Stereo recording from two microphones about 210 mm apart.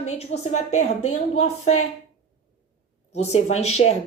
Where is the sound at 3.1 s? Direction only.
30° left (ahead or behind).